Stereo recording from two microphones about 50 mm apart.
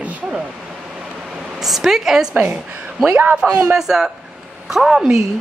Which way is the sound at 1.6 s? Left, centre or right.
Centre.